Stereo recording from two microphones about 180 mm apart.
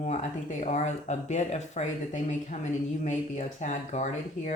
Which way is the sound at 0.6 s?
40° left (ahead or behind).